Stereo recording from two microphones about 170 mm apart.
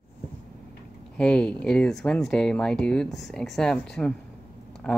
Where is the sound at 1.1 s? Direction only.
5° left (ahead or behind).